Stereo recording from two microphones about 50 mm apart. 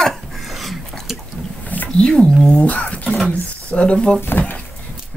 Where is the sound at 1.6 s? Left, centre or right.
Left.